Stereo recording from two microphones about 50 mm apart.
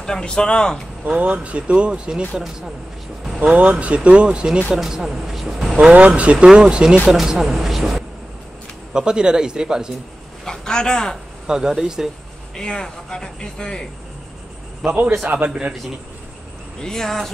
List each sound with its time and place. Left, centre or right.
0.0 s speech: centre
1.1 s speech: right
2.3 s speech: centre
3.4 s speech: right
4.6 s speech: centre
5.8 s speech: centre
8.9 s speech: centre
10.4 s speech: centre
11.4 s speech: centre
12.5 s speech: centre
15.2 s a man's voice: right
16.8 s speech: centre